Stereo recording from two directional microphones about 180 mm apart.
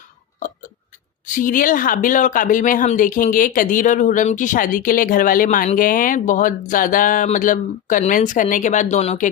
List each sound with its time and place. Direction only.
0.3 s chewing: 45° left (ahead or behind)
1.3 s speech: 45° left (ahead or behind)